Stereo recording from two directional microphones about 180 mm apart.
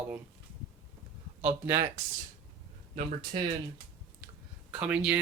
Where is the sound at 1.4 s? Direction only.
10° right (ahead or behind).